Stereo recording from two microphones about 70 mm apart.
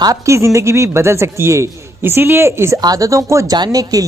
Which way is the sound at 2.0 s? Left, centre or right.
Right.